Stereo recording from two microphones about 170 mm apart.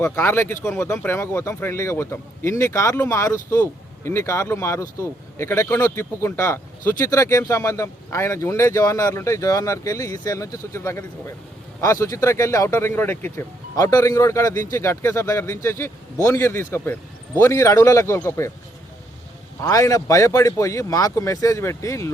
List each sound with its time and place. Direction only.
0.0 s speech: 15° left (ahead or behind)
19.6 s speech: 20° left (ahead or behind)